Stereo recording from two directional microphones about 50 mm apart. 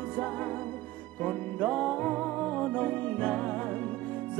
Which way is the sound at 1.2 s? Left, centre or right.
Centre.